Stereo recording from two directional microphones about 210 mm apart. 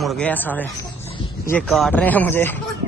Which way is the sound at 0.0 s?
5° left (ahead or behind).